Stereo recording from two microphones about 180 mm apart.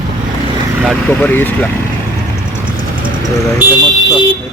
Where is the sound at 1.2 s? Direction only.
10° left (ahead or behind).